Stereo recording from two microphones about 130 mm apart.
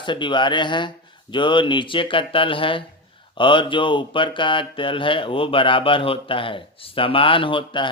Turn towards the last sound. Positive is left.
turn(degrees=40)  # may be behind; listen again after turning